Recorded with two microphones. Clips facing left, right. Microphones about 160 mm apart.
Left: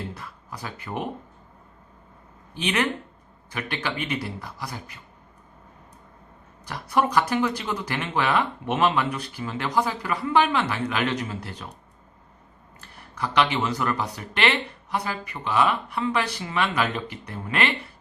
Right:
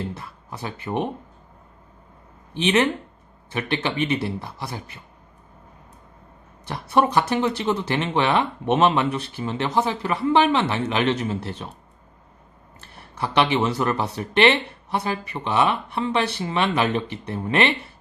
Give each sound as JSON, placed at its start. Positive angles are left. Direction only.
{"t": 0.1, "sound": "speech", "side_deg": -25}
{"t": 2.6, "sound": "speech", "side_deg": -25}
{"t": 6.7, "sound": "speech", "side_deg": -25}
{"t": 12.8, "sound": "speech", "side_deg": -30}